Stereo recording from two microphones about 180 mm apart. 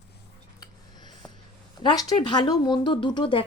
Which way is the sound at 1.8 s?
20° left (ahead or behind).